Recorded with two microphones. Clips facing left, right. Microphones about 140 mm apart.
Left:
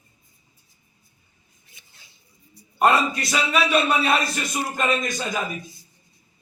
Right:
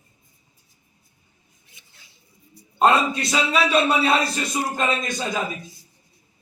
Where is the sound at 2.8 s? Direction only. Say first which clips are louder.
Right 1 dB; 25° right (ahead or behind).